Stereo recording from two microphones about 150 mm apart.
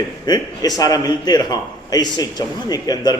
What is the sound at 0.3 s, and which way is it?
A man's voice, 25° left (ahead or behind).